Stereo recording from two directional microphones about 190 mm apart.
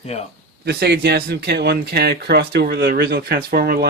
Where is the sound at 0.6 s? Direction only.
60° right (ahead or behind).